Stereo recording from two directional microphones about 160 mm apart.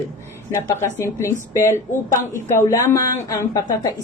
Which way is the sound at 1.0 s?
15° left (ahead or behind).